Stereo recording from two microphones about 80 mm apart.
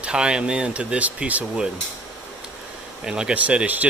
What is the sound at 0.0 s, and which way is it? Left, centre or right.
Speech, centre.